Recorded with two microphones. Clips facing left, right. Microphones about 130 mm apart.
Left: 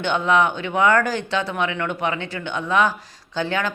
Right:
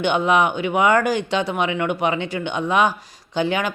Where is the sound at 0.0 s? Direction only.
15° right (ahead or behind).